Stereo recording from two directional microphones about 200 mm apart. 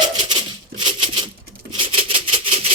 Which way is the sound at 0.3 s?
25° right (ahead or behind).